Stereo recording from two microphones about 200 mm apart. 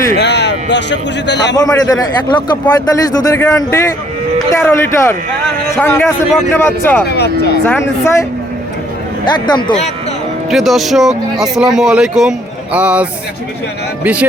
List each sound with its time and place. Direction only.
0.2 s a sound: 60° left (ahead or behind)
1.5 s a man's voice: 20° left (ahead or behind)
7.1 s speech: 55° left (ahead or behind)
7.6 s a man's voice: 10° left (ahead or behind); by 9.9 s 30° left (ahead or behind)
10.5 s a man's voice: centre (ahead or behind)